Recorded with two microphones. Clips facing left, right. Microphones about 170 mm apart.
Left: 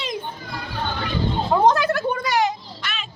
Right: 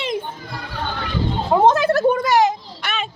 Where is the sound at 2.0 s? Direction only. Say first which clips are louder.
Right 6 dB; 45° right (ahead or behind).